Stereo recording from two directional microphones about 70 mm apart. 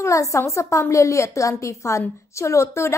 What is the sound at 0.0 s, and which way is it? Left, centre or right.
A woman's voice, left.